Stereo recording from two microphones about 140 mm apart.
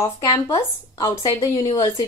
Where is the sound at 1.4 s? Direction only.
40° left (ahead or behind).